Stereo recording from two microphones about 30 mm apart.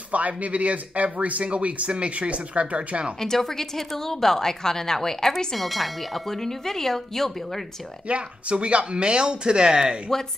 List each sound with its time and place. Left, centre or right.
0.1 s speech: right
3.2 s a woman's voice: centre
5.5 s a woman's voice: centre
8.1 s speech: right
10.1 s speech: centre